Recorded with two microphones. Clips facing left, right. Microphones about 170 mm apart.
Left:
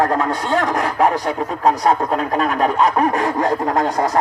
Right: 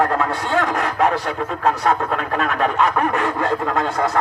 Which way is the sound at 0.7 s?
40° left (ahead or behind).